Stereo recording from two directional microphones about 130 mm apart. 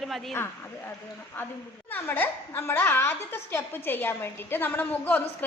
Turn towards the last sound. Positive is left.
turn(degrees=15)  # may be behind; listen again after turning